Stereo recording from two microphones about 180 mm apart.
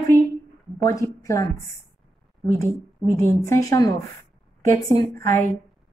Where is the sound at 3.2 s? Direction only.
15° left (ahead or behind).